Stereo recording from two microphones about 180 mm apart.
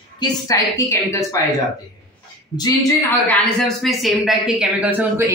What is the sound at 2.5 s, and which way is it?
Speech, 20° left (ahead or behind).